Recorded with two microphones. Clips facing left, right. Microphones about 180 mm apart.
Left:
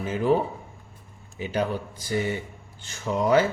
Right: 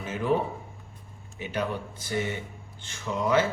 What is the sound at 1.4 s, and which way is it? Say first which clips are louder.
Speech: left 4 dB; 35° left (ahead or behind).